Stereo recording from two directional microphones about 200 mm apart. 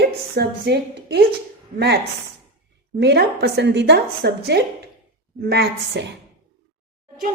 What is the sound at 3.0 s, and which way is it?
A woman's voice, 55° right (ahead or behind).